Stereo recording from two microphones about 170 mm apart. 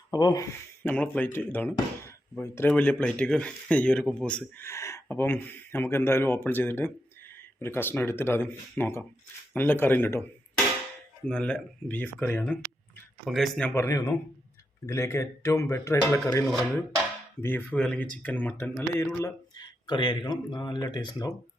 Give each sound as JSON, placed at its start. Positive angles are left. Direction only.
{"t": 0.1, "sound": "speech", "side_deg": 20}
{"t": 0.9, "sound": "speech", "side_deg": 10}
{"t": 11.3, "sound": "speech", "side_deg": 5}
{"t": 13.2, "sound": "speech", "side_deg": 0}
{"t": 16.5, "sound": "music", "side_deg": 0}
{"t": 17.4, "sound": "speech", "side_deg": 10}
{"t": 19.5, "sound": "speech", "side_deg": 25}